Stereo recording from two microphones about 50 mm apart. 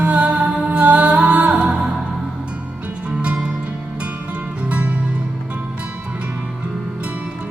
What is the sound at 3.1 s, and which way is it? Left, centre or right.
Music, right.